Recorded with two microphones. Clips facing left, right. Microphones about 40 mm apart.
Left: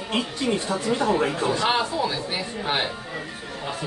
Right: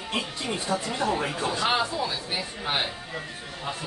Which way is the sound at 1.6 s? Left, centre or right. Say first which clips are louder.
Even; centre.